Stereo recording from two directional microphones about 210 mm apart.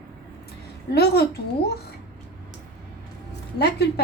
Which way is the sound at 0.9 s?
50° left (ahead or behind).